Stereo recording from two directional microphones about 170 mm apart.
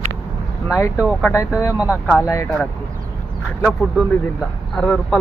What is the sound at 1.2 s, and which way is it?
Speech, 15° left (ahead or behind).